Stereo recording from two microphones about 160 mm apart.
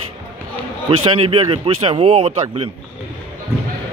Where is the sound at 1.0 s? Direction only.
35° right (ahead or behind).